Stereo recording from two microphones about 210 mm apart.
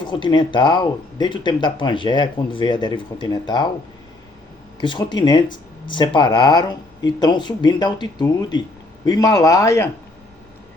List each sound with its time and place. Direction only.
0.0 s speech: 20° left (ahead or behind)
4.8 s speech: 20° left (ahead or behind)